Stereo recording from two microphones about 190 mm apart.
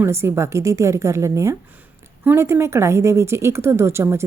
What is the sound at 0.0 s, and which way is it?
A woman's voice, 15° right (ahead or behind).